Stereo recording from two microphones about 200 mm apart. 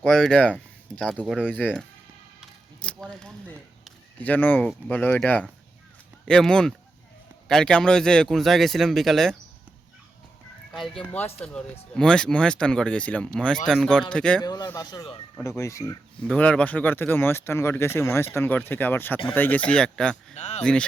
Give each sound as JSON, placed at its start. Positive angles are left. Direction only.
{"t": 0.0, "sound": "speech", "side_deg": 5}
{"t": 2.4, "sound": "a sound", "side_deg": 5}
{"t": 4.9, "sound": "speech", "side_deg": 10}
{"t": 10.7, "sound": "speech", "side_deg": 0}
{"t": 14.4, "sound": "a man's voice", "side_deg": 20}
{"t": 16.2, "sound": "speech", "side_deg": 5}
{"t": 20.3, "sound": "a sound", "side_deg": 35}
{"t": 20.6, "sound": "speech", "side_deg": 5}